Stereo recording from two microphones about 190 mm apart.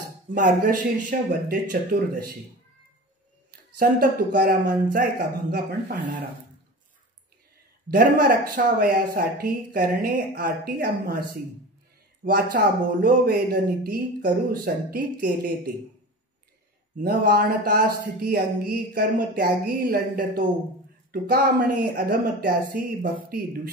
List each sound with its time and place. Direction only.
0.3 s speech: 45° right (ahead or behind)
3.7 s speech: 50° right (ahead or behind)
7.9 s speech: 50° right (ahead or behind)
12.3 s speech: 55° right (ahead or behind)
16.9 s speech: 50° right (ahead or behind)